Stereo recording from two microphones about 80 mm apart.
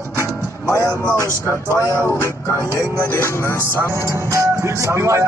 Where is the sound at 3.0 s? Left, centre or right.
Left.